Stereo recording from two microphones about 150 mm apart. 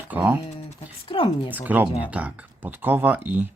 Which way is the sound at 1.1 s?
35° left (ahead or behind).